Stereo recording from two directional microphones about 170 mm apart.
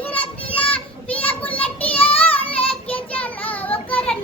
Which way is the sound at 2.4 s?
35° left (ahead or behind).